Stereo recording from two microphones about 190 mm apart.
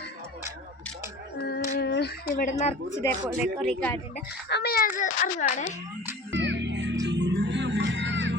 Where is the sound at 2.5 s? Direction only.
35° left (ahead or behind).